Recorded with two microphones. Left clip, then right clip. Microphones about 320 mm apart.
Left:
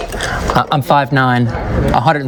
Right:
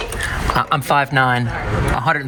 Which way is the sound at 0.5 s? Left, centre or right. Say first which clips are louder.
Left 4 dB; centre.